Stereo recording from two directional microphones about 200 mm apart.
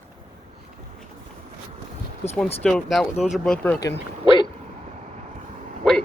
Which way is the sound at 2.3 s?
5° left (ahead or behind).